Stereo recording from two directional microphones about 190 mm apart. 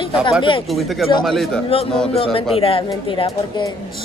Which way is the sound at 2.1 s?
30° left (ahead or behind).